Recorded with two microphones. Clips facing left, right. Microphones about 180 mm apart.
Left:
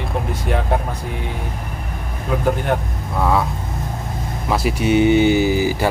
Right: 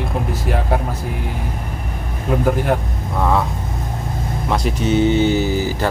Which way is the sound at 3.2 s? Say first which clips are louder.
Even; 5° left (ahead or behind).